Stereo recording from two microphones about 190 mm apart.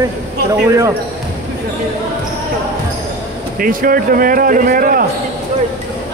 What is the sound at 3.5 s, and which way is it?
A man's voice, 45° right (ahead or behind).